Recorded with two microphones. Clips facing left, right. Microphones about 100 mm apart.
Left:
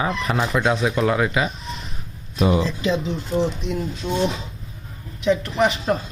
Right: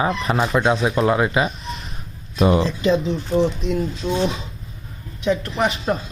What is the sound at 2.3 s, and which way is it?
Speech, 50° right (ahead or behind).